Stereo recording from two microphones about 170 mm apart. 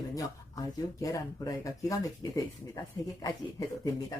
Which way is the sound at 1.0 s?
20° left (ahead or behind).